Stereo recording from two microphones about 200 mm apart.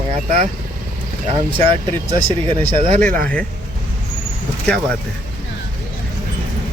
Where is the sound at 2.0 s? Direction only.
25° right (ahead or behind).